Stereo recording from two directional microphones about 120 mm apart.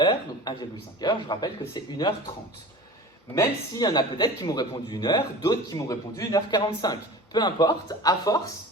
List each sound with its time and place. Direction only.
0.0 s a man's voice: 40° left (ahead or behind)
3.3 s a man's voice: 35° left (ahead or behind)